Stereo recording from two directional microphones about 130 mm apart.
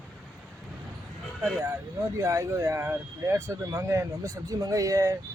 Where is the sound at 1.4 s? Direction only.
20° right (ahead or behind).